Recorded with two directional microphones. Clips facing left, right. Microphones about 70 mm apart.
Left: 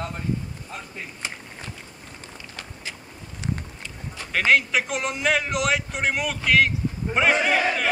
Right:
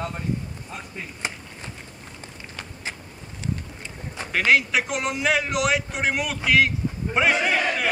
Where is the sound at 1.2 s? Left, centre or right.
Right.